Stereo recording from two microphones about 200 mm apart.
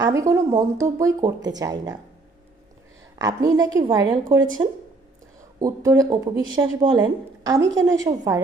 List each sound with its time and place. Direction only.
0.0 s speech: 15° right (ahead or behind)
3.2 s speech: 20° right (ahead or behind)